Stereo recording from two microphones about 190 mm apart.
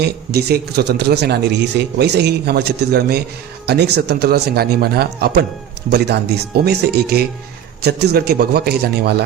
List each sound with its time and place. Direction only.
0.0 s speech: 60° right (ahead or behind)